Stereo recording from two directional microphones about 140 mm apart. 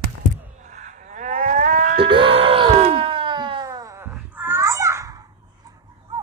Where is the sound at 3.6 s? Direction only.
25° right (ahead or behind).